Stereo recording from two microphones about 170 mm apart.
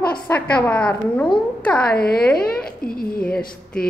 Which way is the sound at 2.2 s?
5° left (ahead or behind).